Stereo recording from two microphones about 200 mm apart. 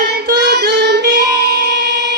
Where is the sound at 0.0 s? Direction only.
50° right (ahead or behind).